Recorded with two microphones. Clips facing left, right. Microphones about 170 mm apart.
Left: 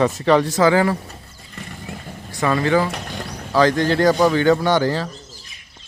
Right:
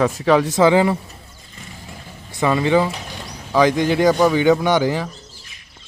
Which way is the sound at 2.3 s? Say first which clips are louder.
Right 1 dB; 20° right (ahead or behind).